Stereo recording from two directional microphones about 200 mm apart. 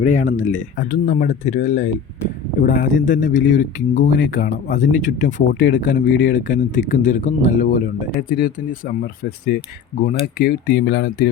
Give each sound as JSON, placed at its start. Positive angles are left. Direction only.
{"t": 0.0, "sound": "speech", "side_deg": 40}
{"t": 0.3, "sound": "speech", "side_deg": 80}
{"t": 0.5, "sound": "speech", "side_deg": 40}
{"t": 10.0, "sound": "speech", "side_deg": 45}